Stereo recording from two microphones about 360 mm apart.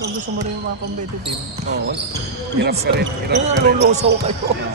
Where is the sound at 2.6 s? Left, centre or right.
Right.